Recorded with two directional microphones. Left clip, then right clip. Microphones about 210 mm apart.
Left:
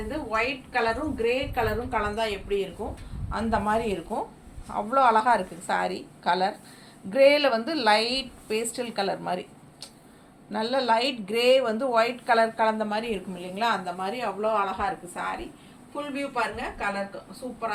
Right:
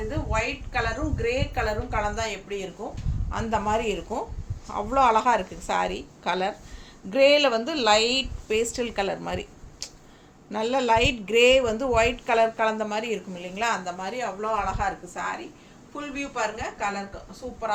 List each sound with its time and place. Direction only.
0.3 s a woman's voice: 15° right (ahead or behind)
10.5 s a woman's voice: 25° right (ahead or behind)